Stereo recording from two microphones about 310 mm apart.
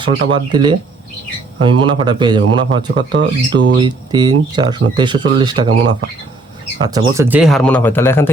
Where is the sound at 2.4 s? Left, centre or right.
Right.